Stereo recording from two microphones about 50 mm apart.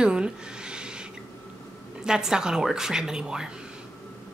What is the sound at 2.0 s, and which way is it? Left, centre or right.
A woman's voice, centre.